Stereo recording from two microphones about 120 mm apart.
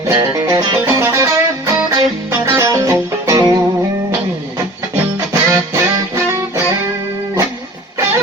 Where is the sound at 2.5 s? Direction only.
25° right (ahead or behind).